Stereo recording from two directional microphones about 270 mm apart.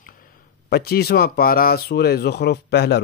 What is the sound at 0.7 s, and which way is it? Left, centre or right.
Speech, left.